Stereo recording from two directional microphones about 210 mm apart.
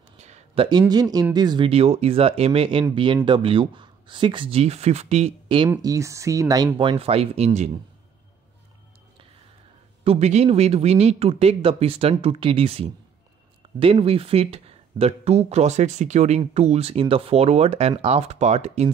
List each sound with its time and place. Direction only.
0.2 s a sound: 30° right (ahead or behind)
0.7 s speech: 20° right (ahead or behind)
5.7 s speech: 15° right (ahead or behind); by 7.8 s 30° right (ahead or behind)
10.0 s speech: 30° right (ahead or behind)